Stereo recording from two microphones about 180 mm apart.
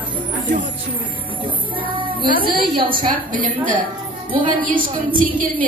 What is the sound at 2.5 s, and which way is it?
Speech, 30° right (ahead or behind).